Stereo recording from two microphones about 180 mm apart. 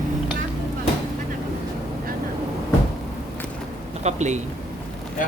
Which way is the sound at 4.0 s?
40° right (ahead or behind).